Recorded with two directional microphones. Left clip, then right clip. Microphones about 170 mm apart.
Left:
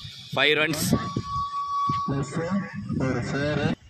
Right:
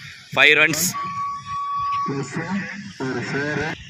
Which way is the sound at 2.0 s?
35° left (ahead or behind).